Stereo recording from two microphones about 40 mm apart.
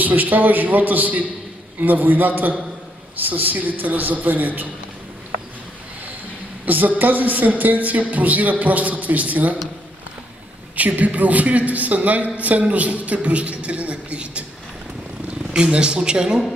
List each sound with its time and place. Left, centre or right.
0.0 s a woman's voice: right
6.6 s a woman's voice: right
10.8 s a man's voice: right
15.5 s speech: right